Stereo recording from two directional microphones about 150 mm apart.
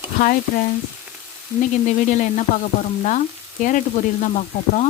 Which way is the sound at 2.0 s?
55° left (ahead or behind).